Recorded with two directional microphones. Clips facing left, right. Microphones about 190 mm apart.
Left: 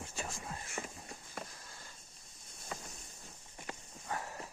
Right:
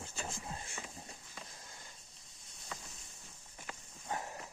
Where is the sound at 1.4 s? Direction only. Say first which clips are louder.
Left 8 dB; 60° left (ahead or behind).